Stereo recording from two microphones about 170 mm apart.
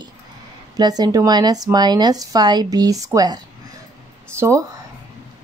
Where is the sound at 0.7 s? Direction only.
25° right (ahead or behind).